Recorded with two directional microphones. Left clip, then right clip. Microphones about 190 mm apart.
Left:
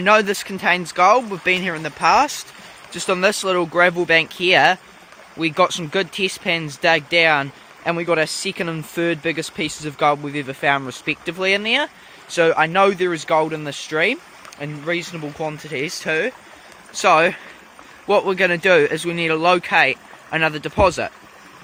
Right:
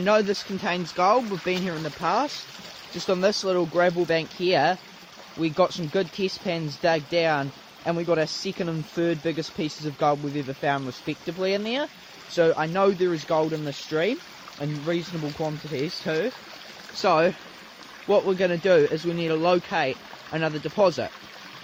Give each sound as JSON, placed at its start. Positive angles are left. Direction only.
{"t": 0.0, "sound": "speech", "side_deg": 20}
{"t": 1.8, "sound": "speech", "side_deg": 20}
{"t": 14.6, "sound": "speech", "side_deg": -5}